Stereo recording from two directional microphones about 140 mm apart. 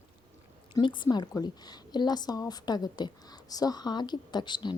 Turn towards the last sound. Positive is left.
turn(degrees=35)  # may be behind; listen again after turning